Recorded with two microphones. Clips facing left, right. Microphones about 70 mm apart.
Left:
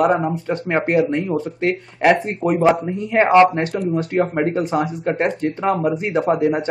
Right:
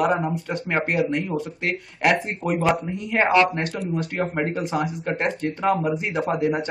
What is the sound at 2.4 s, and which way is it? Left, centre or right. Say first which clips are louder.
Speech: left 6 dB; centre.